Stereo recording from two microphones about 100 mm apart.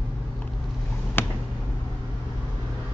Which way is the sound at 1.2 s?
20° left (ahead or behind).